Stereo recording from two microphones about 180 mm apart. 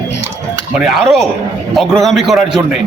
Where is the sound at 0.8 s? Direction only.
Centre (ahead or behind).